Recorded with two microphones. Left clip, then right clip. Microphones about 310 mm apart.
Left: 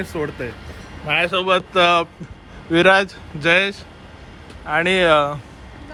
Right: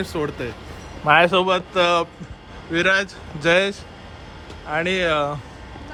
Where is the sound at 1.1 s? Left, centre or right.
Right.